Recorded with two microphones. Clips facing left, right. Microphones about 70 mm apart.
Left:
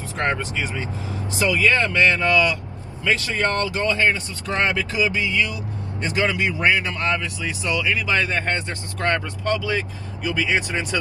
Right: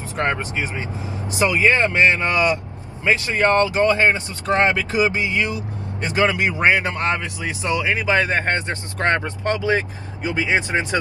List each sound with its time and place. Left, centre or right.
0.2 s speech: right